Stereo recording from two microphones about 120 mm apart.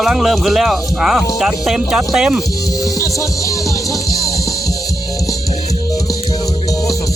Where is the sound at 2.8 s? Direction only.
25° left (ahead or behind).